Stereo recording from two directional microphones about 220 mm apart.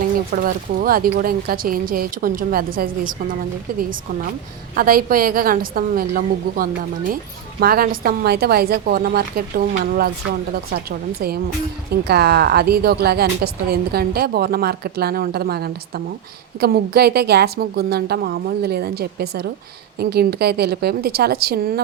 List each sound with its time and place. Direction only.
0.3 s speech: 40° right (ahead or behind)
4.7 s speech: 40° right (ahead or behind)
12.0 s speech: 45° right (ahead or behind)